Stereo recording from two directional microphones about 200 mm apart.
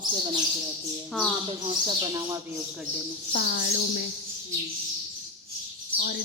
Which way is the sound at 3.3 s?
55° left (ahead or behind).